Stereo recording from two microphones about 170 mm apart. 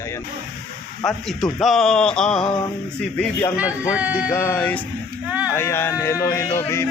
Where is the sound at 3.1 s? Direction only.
10° left (ahead or behind).